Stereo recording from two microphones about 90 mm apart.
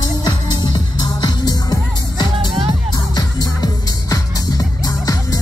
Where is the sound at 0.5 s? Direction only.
50° left (ahead or behind).